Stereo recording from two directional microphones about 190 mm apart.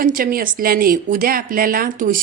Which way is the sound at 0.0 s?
45° right (ahead or behind).